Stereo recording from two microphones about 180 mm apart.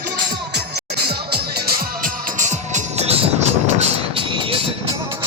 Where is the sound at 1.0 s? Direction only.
60° right (ahead or behind).